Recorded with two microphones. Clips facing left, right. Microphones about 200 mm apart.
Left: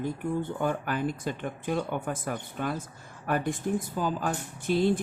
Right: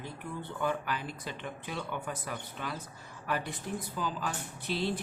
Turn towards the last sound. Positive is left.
turn(degrees=50)  # may be behind; listen again after turning